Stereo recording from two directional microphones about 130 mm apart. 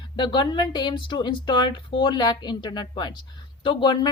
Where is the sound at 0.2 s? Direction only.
35° left (ahead or behind).